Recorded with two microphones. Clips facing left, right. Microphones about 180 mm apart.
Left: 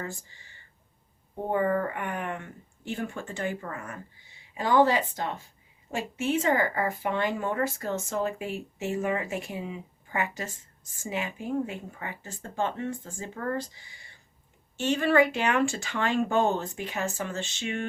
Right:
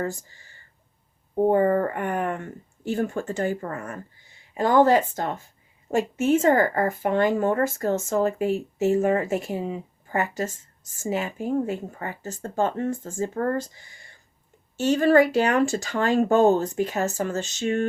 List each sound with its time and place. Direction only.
0.0 s speech: 40° right (ahead or behind)